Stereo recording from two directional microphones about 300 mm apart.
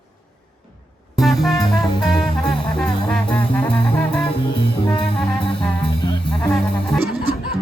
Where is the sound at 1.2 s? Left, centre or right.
Centre.